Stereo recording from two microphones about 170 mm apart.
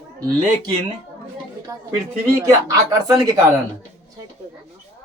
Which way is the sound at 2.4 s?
20° right (ahead or behind).